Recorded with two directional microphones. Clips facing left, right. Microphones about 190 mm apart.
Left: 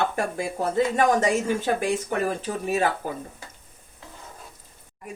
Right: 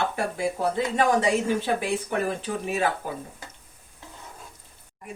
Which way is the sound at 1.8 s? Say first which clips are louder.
Left 2 dB; 40° left (ahead or behind).